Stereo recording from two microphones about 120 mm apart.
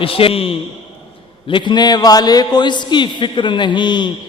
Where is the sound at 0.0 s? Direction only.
50° left (ahead or behind).